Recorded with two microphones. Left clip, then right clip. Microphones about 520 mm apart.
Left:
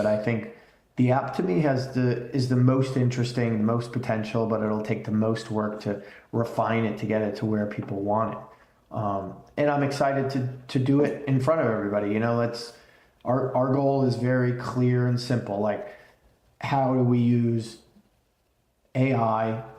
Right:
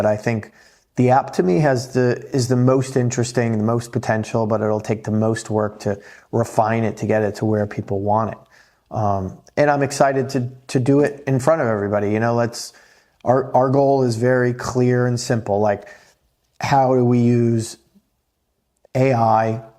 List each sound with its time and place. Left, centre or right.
0.0 s speech: right
18.9 s speech: right